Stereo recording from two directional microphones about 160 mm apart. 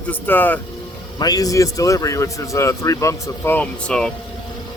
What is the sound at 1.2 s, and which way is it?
A man's voice, 25° left (ahead or behind).